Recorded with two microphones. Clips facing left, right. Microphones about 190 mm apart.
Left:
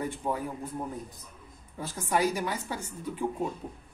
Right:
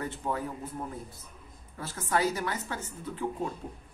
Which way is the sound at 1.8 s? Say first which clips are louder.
Left 1 dB; 15° left (ahead or behind).